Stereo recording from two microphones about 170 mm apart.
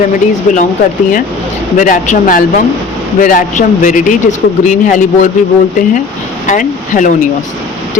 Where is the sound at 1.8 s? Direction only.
45° left (ahead or behind).